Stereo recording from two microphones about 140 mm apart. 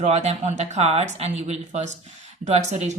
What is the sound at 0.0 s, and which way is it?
Speech, 50° right (ahead or behind).